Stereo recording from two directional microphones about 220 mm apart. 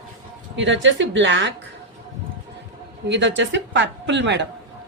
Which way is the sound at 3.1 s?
55° right (ahead or behind).